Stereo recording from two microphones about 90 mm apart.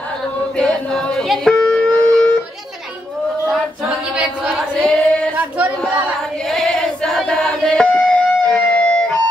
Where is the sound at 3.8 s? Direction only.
10° right (ahead or behind).